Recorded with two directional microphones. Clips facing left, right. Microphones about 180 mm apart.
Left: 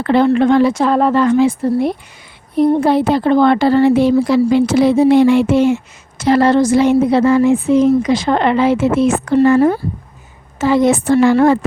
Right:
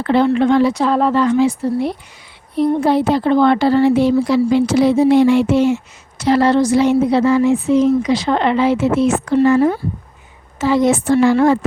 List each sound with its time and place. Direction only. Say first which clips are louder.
0.0 s speech: left 2 dB; 55° left (ahead or behind)